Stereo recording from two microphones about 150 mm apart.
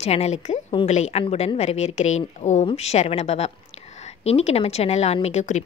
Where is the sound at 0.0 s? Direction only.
45° left (ahead or behind).